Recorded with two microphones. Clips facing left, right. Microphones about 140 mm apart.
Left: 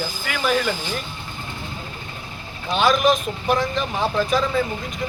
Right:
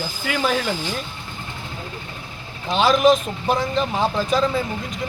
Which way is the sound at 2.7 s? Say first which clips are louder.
Right 2 dB; 30° right (ahead or behind).